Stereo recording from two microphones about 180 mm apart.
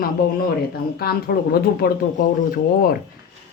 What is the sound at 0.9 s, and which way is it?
Speech, 60° left (ahead or behind).